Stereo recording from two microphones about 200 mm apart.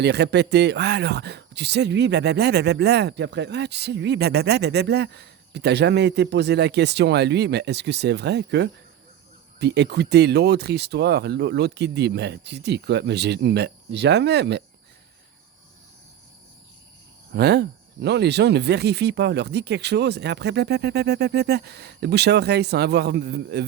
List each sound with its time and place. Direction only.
0.0 s speech: 55° right (ahead or behind)
17.3 s speech: 55° right (ahead or behind)